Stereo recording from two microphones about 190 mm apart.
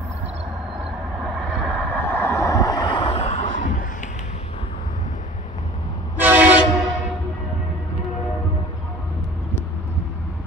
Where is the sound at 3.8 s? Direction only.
45° left (ahead or behind).